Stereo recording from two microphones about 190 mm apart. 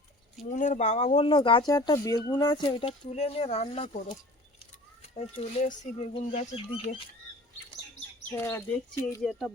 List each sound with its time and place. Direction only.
0.5 s speech: 40° left (ahead or behind)
1.3 s speech: 25° left (ahead or behind)
5.1 s speech: 35° left (ahead or behind)
8.3 s speech: 15° left (ahead or behind)